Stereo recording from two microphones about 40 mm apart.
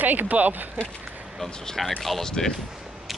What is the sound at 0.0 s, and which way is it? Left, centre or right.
Speech, right.